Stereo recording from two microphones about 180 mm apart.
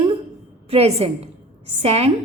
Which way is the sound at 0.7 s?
35° right (ahead or behind).